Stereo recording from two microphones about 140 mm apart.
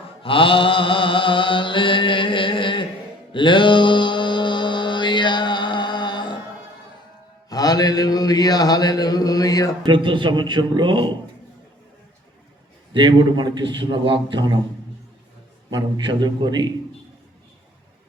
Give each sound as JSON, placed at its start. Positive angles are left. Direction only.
{"t": 0.2, "sound": "mantra", "side_deg": 40}
{"t": 7.5, "sound": "mantra", "side_deg": 25}
{"t": 9.8, "sound": "a man's voice", "side_deg": -35}
{"t": 12.9, "sound": "a man's voice", "side_deg": -35}
{"t": 15.7, "sound": "a man's voice", "side_deg": -30}